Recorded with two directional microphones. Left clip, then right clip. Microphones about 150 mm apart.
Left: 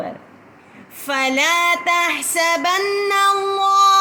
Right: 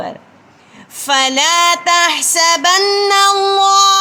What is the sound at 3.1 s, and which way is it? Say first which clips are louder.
Child singing: right 4 dB; 60° right (ahead or behind).